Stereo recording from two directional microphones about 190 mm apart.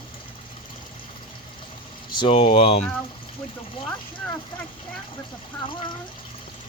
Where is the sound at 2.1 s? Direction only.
25° left (ahead or behind).